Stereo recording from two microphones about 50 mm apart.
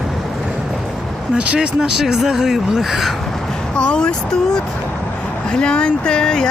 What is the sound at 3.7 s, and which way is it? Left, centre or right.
Speech, centre.